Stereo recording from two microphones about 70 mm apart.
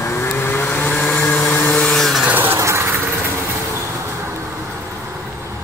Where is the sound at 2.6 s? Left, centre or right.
Right.